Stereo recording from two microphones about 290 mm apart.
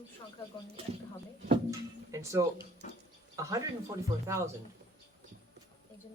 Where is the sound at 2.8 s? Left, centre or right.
Left.